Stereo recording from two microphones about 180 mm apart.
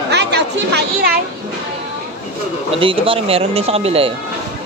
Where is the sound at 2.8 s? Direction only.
30° right (ahead or behind).